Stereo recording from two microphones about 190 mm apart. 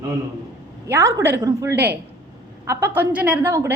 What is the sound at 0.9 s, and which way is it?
A woman's voice, 15° right (ahead or behind).